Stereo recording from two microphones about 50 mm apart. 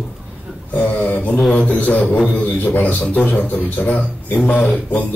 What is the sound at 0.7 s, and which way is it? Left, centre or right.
Speech, left.